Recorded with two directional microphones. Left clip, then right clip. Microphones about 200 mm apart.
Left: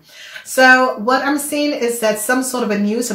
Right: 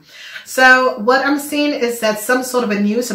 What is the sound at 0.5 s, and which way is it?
Speech, 50° left (ahead or behind).